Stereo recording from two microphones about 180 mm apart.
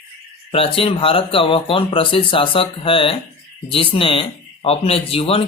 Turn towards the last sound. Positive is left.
turn(degrees=30)  # may be behind; listen again after turning